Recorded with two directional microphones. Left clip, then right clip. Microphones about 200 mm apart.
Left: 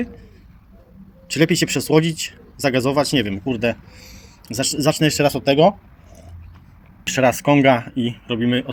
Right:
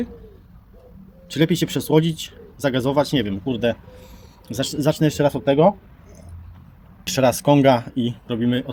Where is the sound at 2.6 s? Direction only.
5° left (ahead or behind).